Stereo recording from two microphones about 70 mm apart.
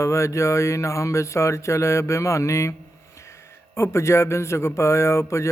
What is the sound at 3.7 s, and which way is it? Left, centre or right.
Speech, left.